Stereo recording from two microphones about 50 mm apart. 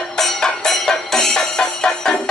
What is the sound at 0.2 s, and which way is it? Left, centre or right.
Music, centre.